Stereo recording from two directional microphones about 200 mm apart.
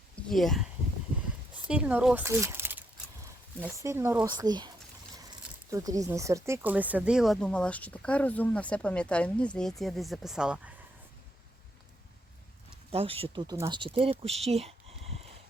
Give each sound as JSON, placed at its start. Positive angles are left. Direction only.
{"t": 0.2, "sound": "speech", "side_deg": 0}
{"t": 1.6, "sound": "speech", "side_deg": -5}
{"t": 5.7, "sound": "speech", "side_deg": -15}
{"t": 12.9, "sound": "speech", "side_deg": -30}
{"t": 14.4, "sound": "a sound", "side_deg": -30}